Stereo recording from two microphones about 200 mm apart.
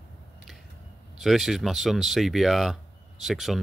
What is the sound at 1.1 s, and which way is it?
Speech, centre (ahead or behind).